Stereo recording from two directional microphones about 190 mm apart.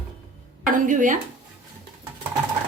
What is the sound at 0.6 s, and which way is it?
Speech, 40° right (ahead or behind).